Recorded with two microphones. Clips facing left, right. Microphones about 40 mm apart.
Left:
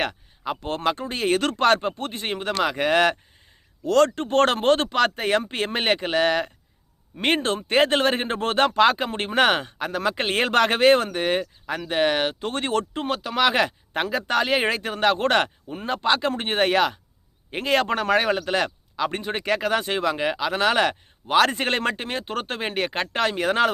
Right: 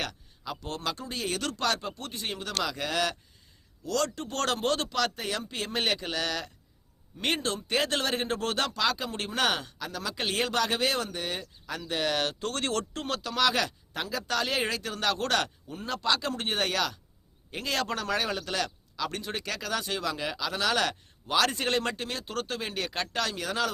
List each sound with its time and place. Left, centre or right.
0.0 s a man's voice: left